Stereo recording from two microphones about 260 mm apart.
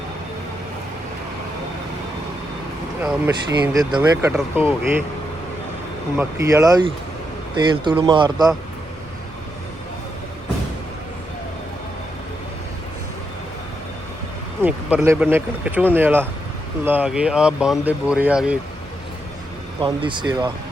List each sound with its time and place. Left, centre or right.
3.0 s speech: centre
6.1 s speech: centre
14.6 s speech: centre
19.8 s speech: centre